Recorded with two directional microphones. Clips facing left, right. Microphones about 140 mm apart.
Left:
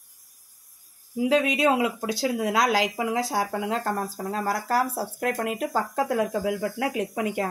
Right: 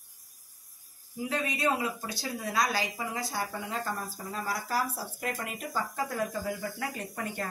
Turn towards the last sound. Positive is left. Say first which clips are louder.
# left 9 dB
turn(degrees=90)